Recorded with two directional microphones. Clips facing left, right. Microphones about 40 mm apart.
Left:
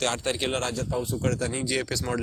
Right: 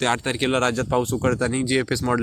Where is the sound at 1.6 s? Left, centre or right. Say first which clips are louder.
Right 6 dB; right.